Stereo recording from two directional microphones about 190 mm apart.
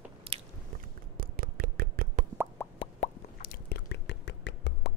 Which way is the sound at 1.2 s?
50° right (ahead or behind).